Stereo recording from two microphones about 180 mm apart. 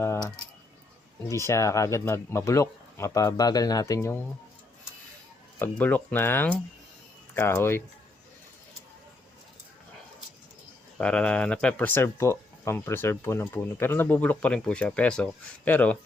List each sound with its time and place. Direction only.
1.3 s speech: 15° left (ahead or behind)
5.5 s speech: 10° left (ahead or behind)
10.9 s speech: 5° left (ahead or behind)